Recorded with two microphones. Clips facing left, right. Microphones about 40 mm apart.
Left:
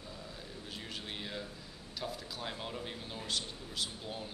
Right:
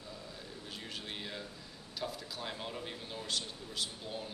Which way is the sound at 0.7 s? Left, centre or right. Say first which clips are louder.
Even; centre.